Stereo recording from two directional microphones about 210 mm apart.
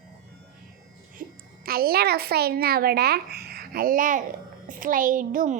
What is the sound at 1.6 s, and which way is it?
A child's voice, 45° right (ahead or behind).